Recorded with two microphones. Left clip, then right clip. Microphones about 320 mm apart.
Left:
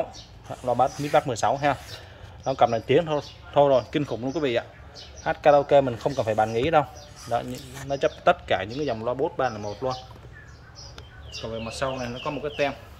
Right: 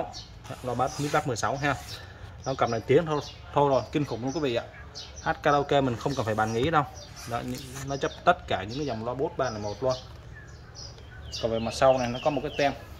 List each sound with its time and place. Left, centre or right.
0.5 s speech: centre
11.5 s speech: centre